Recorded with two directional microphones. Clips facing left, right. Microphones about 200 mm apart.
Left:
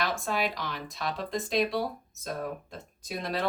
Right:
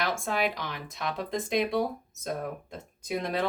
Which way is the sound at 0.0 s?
20° right (ahead or behind).